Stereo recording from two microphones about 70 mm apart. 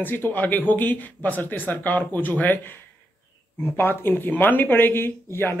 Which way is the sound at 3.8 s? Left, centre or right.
Left.